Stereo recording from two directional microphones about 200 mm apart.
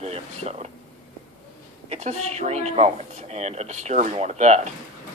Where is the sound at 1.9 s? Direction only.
35° right (ahead or behind).